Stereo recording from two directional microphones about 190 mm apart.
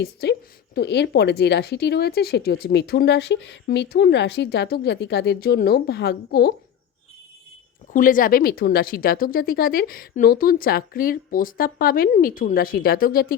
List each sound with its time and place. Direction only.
0.0 s a woman's voice: 60° left (ahead or behind)
7.9 s speech: 45° left (ahead or behind)